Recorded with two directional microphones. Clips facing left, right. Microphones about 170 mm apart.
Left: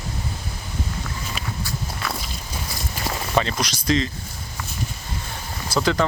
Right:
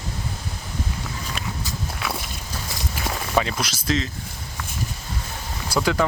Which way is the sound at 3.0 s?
Centre (ahead or behind).